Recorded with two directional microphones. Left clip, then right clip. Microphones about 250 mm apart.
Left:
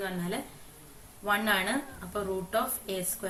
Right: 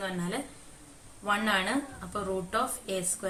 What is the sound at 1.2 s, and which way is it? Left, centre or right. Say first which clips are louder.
A woman's voice: even; centre.